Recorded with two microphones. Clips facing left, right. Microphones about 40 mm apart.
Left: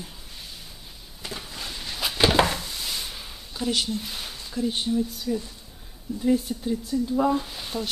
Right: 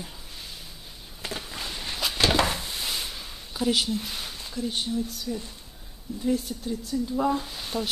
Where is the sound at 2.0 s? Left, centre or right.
Centre.